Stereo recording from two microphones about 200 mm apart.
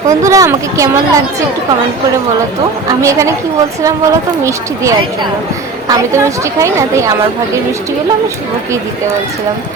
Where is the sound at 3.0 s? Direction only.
15° right (ahead or behind).